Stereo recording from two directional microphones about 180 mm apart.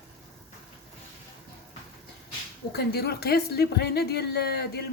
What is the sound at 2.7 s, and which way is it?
A woman's voice, 60° left (ahead or behind).